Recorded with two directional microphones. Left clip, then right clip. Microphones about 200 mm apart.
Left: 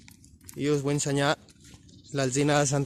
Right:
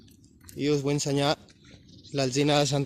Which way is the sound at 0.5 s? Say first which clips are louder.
Right 1 dB; centre (ahead or behind).